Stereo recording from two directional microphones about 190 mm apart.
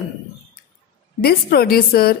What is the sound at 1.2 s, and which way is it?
Speech, 55° left (ahead or behind).